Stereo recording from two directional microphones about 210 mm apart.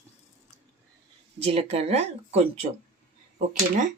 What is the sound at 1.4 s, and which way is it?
Speech, 25° right (ahead or behind).